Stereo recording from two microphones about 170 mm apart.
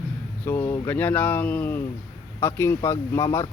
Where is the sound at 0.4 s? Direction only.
15° left (ahead or behind).